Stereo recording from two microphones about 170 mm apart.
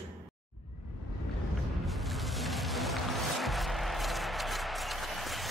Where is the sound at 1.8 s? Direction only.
Centre (ahead or behind).